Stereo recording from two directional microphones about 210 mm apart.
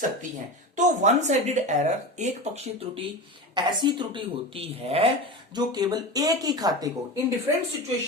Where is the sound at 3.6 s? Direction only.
20° right (ahead or behind).